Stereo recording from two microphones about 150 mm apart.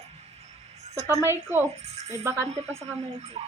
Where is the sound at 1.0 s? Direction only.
15° right (ahead or behind).